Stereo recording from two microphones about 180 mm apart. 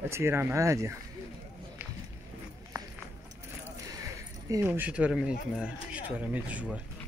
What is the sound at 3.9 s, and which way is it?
Speech, 15° right (ahead or behind).